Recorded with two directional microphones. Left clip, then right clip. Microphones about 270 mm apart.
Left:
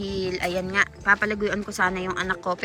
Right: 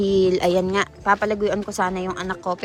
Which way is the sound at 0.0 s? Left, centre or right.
Right.